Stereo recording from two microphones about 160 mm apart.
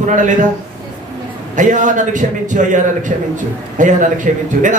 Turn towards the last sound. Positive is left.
turn(degrees=-50)  # may be behind; listen again after turning